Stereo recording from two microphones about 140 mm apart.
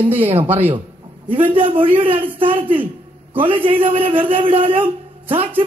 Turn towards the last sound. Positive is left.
turn(degrees=-40)  # may be behind; listen again after turning